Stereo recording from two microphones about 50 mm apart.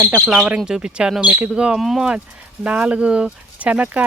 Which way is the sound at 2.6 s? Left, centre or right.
Right.